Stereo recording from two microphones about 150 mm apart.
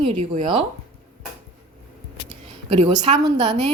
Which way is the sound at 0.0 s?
35° right (ahead or behind).